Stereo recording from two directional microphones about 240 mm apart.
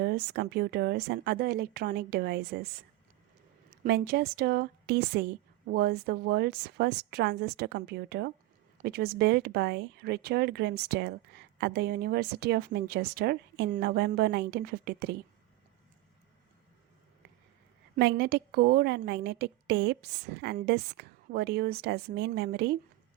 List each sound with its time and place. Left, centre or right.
0.0 s speech: right
3.8 s a woman's voice: right
17.9 s a woman's voice: right